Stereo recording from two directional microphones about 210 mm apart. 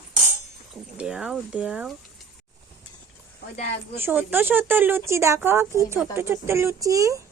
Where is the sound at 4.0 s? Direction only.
10° right (ahead or behind).